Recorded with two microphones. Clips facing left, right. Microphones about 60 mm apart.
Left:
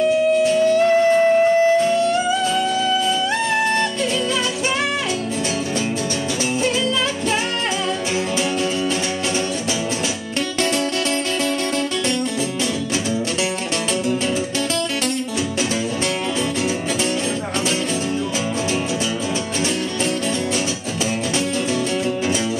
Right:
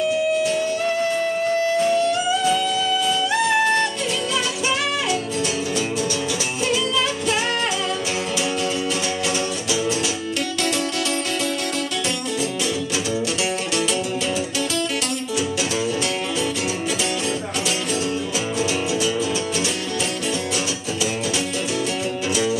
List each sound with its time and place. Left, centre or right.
1.0 s music: left